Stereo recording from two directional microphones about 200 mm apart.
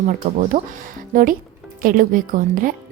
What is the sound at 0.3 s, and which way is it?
A woman's voice, 40° right (ahead or behind).